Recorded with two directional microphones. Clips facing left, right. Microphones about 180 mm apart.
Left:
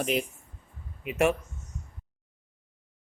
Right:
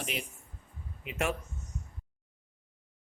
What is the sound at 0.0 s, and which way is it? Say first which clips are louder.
Speech: left 10 dB; 45° left (ahead or behind).